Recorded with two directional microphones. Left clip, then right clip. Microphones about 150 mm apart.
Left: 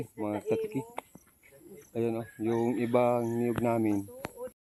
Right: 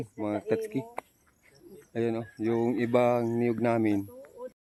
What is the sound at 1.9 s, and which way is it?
Speech, 20° right (ahead or behind).